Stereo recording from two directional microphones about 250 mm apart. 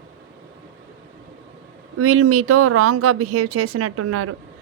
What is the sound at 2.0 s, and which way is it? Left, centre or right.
Speech, right.